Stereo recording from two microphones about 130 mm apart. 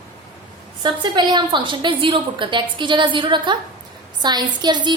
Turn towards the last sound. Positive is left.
turn(degrees=-35)  # may be behind; listen again after turning